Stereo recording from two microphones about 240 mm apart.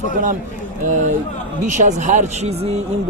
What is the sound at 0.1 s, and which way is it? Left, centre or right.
Speech, right.